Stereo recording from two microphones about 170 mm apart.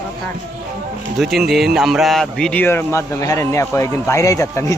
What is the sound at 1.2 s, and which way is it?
A man's voice, centre (ahead or behind).